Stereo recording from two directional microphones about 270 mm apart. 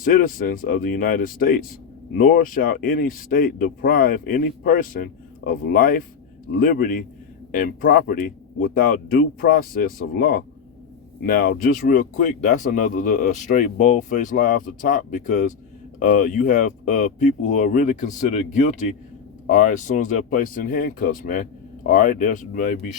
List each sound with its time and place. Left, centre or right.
0.0 s a man's voice: left